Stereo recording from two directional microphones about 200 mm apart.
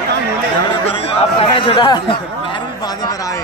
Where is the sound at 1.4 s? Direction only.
25° left (ahead or behind).